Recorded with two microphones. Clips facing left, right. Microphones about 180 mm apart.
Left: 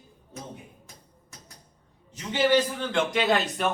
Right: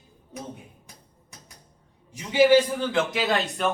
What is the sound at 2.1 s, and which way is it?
A man's voice, 10° right (ahead or behind).